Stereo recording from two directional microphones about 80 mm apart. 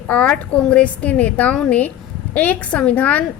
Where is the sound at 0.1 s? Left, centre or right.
Centre.